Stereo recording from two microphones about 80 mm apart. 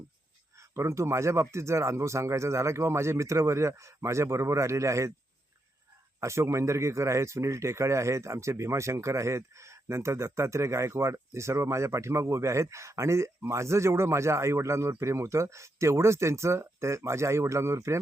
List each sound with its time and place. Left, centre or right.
0.7 s speech: right
6.1 s speech: right